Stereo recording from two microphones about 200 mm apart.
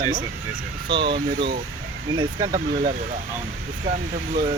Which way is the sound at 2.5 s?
40° right (ahead or behind).